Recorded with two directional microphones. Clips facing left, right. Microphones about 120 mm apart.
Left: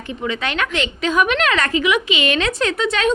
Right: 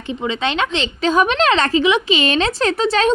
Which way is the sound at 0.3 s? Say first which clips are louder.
Right 3 dB; 25° right (ahead or behind).